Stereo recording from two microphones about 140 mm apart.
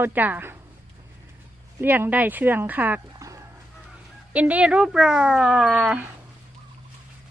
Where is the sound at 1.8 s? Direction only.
15° right (ahead or behind).